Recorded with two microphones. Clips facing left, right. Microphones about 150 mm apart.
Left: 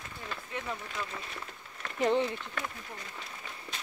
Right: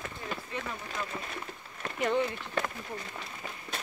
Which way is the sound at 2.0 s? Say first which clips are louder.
Left 1 dB; 30° left (ahead or behind).